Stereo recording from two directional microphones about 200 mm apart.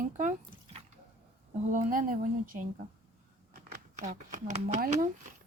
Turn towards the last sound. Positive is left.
turn(degrees=-35)  # may be behind; listen again after turning